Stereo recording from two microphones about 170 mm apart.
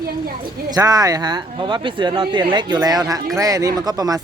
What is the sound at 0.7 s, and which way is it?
Speech, 20° right (ahead or behind).